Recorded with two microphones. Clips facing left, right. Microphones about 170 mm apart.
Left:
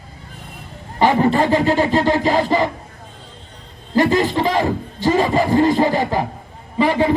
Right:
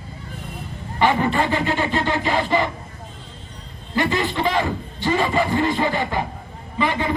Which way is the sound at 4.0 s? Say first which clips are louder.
Left 6 dB; 40° left (ahead or behind).